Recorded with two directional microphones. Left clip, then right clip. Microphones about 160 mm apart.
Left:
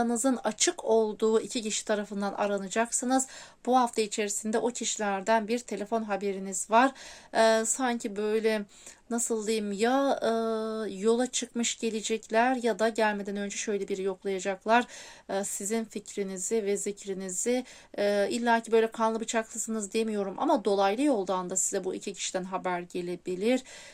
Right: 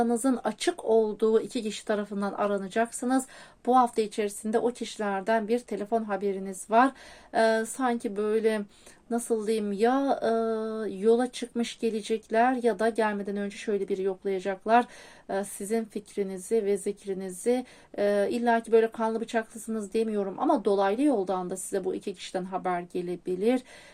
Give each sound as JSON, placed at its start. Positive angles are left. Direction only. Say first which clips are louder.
{"t": 0.0, "sound": "speech", "louder": "right 2 dB", "side_deg": 25}